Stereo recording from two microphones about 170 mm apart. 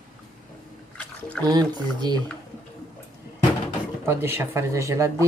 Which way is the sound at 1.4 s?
25° right (ahead or behind).